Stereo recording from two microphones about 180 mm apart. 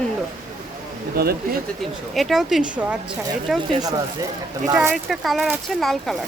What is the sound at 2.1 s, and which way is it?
Speech, centre (ahead or behind).